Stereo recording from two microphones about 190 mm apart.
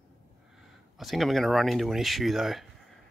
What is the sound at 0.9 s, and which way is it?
Speech, centre (ahead or behind).